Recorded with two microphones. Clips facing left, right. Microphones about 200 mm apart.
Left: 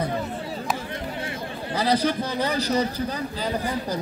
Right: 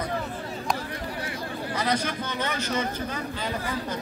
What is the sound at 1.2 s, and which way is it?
A man's voice, 30° left (ahead or behind).